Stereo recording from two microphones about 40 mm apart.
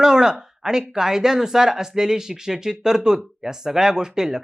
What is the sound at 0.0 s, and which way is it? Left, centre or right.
Speech, centre.